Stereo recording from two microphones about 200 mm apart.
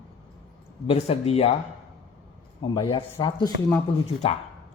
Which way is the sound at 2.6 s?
20° left (ahead or behind).